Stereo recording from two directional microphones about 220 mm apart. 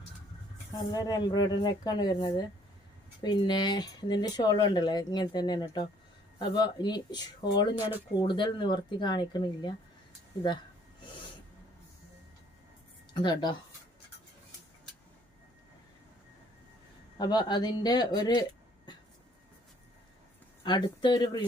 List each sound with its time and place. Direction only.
0.7 s speech: 20° left (ahead or behind)
13.1 s speech: 20° left (ahead or behind)
17.2 s speech: 20° left (ahead or behind)
20.7 s speech: 20° left (ahead or behind)